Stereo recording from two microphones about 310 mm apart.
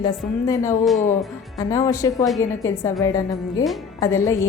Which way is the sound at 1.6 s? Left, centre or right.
Centre.